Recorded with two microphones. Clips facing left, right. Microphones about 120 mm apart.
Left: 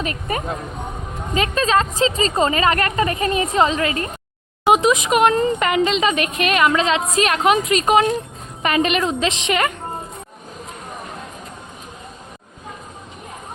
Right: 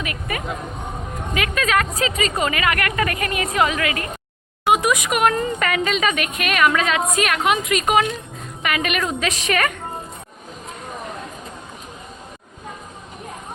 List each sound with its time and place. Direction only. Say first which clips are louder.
0.0 s speech: left 3 dB; 35° left (ahead or behind)